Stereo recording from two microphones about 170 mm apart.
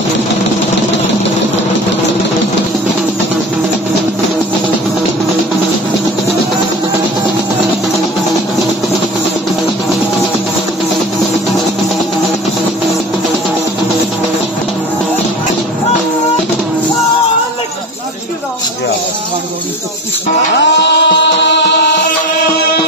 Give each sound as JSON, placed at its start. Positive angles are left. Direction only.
{"t": 20.5, "sound": "music", "side_deg": 90}